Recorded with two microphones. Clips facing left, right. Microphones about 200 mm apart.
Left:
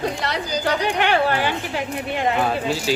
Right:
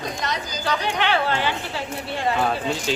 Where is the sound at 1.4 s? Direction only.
15° left (ahead or behind).